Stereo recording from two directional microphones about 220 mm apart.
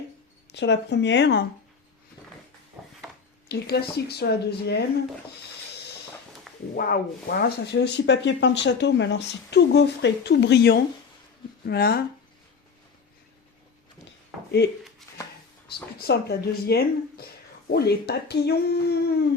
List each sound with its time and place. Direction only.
0.5 s speech: 50° left (ahead or behind)
2.8 s a sound: 5° right (ahead or behind)
3.5 s speech: 45° left (ahead or behind)
6.7 s speech: 40° left (ahead or behind)
16.0 s speech: 45° left (ahead or behind)